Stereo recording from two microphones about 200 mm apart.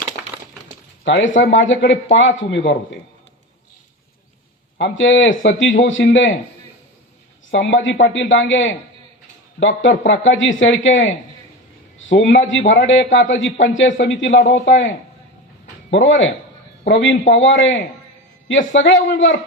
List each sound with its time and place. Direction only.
1.0 s a man's voice: 65° left (ahead or behind)
4.8 s a man's voice: 70° left (ahead or behind)
6.0 s a man's voice: 55° left (ahead or behind)
7.5 s a man's voice: 70° left (ahead or behind)